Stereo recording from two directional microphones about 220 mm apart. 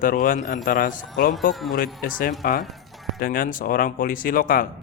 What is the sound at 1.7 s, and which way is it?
A man's voice, 40° left (ahead or behind).